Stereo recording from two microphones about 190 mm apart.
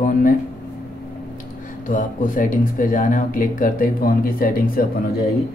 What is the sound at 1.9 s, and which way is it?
Speech, 45° left (ahead or behind).